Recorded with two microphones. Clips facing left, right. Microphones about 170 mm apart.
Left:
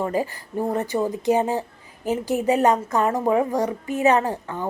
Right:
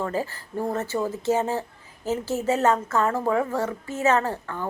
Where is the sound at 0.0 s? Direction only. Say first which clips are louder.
Left 3 dB; 15° left (ahead or behind).